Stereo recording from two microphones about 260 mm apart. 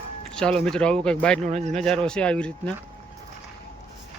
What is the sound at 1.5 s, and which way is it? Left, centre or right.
Speech, right.